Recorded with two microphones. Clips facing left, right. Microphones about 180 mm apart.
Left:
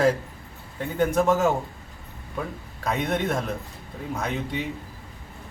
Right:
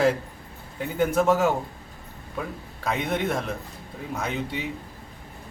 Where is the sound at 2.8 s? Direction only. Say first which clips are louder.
Left 1 dB; centre (ahead or behind).